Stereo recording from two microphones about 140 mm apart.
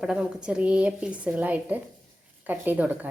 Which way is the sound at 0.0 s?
5° right (ahead or behind).